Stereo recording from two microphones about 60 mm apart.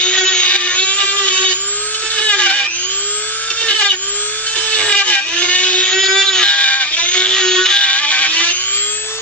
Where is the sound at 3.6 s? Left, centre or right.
Centre.